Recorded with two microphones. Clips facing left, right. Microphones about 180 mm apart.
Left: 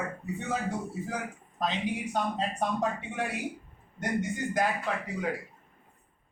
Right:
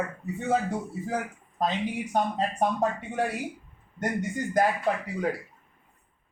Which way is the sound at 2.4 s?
45° right (ahead or behind).